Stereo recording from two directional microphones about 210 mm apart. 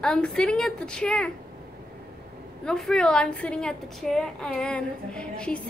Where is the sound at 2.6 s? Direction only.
Centre (ahead or behind).